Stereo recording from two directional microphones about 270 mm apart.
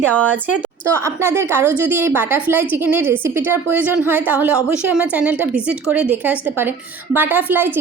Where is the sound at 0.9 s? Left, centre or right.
Centre.